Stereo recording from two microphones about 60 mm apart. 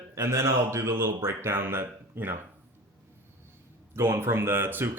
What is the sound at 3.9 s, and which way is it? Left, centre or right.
Speech, right.